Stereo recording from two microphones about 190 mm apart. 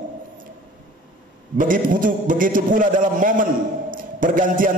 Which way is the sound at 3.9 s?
45° right (ahead or behind).